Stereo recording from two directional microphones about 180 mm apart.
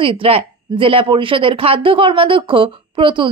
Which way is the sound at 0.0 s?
30° right (ahead or behind).